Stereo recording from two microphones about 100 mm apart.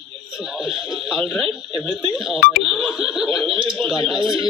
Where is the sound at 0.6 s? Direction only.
5° right (ahead or behind).